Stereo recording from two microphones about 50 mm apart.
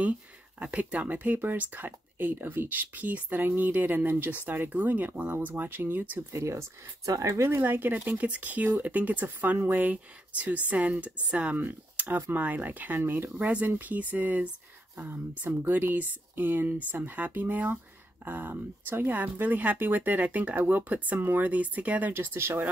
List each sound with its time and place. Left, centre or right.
0.6 s speech: right
6.3 s speech: right
7.6 s speech: right
11.5 s speech: right
13.4 s speech: right
15.4 s speech: right
22.1 s speech: right